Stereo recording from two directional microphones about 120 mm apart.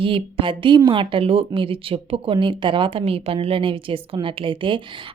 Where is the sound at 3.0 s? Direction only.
55° right (ahead or behind).